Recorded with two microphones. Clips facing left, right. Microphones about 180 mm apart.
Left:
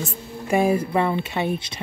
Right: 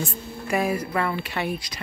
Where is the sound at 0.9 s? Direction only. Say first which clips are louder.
Left 4 dB; 25° left (ahead or behind).